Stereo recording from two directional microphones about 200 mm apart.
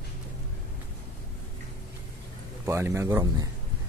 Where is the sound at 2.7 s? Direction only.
15° right (ahead or behind).